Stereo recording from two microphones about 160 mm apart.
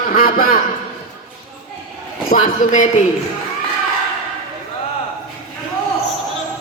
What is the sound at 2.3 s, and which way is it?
Speech, 55° left (ahead or behind).